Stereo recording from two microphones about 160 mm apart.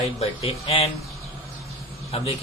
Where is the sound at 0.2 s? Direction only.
40° left (ahead or behind).